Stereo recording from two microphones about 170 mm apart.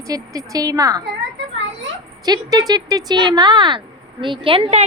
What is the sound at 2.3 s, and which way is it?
A woman's voice, 20° right (ahead or behind).